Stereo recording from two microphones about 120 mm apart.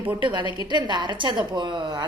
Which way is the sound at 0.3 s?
40° right (ahead or behind).